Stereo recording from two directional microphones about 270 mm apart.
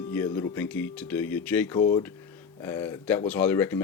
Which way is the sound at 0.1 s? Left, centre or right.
Centre.